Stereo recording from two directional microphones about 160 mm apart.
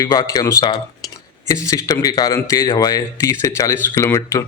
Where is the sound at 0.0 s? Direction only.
25° left (ahead or behind).